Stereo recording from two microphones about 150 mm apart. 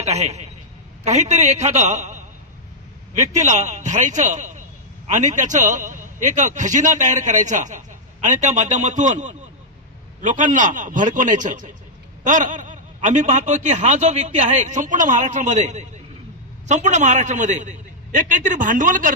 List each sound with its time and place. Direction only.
0.0 s a man's voice: 45° right (ahead or behind)